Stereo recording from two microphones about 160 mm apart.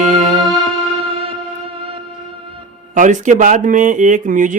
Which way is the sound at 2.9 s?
50° right (ahead or behind).